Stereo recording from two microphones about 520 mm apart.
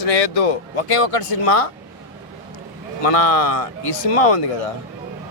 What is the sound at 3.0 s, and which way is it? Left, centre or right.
Speech, left.